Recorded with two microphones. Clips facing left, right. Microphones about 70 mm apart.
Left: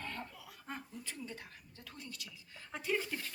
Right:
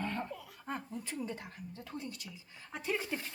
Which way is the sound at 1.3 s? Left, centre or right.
Right.